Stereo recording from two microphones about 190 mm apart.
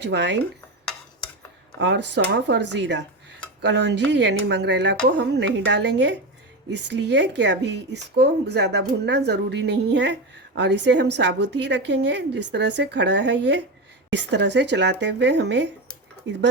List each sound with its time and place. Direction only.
0.0 s speech: 65° right (ahead or behind)
1.8 s a woman's voice: 70° right (ahead or behind)